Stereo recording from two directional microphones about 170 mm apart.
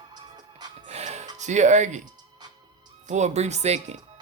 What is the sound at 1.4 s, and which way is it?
Speech, 45° right (ahead or behind).